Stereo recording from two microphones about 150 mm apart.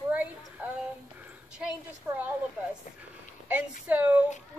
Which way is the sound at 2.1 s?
10° right (ahead or behind).